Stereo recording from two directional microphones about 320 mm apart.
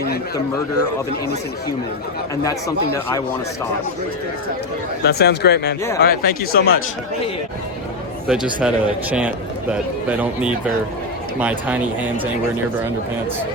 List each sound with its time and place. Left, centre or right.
2.3 s speech: centre
5.0 s speech: left
8.3 s speech: centre